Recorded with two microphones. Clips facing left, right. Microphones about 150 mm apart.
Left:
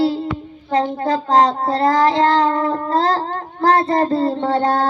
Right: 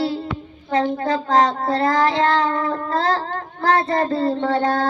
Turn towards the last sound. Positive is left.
turn(degrees=35)  # may be behind; listen again after turning